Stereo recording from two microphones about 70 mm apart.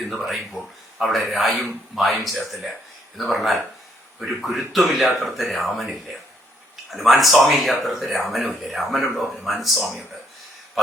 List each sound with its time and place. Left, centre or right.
0.0 s speech: centre